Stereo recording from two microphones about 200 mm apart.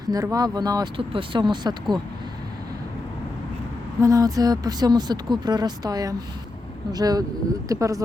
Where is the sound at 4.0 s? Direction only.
15° right (ahead or behind).